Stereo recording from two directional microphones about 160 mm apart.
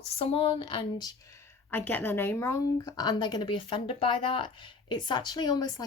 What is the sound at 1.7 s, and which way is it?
Speech, 10° left (ahead or behind).